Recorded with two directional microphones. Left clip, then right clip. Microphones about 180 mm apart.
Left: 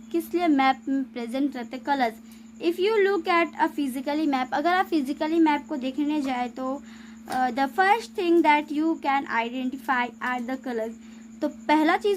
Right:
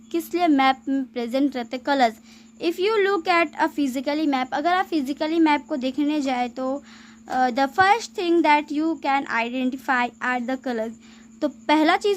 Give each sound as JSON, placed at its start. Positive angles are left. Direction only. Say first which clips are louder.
{"t": 0.1, "sound": "a woman's voice", "louder": "right 3 dB", "side_deg": -30}